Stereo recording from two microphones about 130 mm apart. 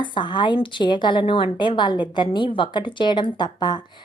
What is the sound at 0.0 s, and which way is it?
A woman's voice, 35° left (ahead or behind).